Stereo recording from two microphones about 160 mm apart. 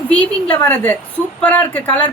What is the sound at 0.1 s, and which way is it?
Speech, 10° left (ahead or behind).